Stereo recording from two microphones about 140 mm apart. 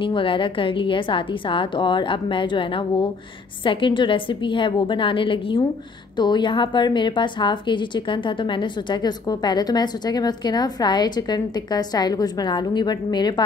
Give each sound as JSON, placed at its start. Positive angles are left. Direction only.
{"t": 0.0, "sound": "a woman's voice", "side_deg": 40}